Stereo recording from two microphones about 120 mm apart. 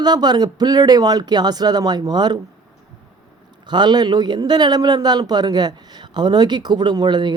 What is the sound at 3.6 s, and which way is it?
Speech, 35° right (ahead or behind).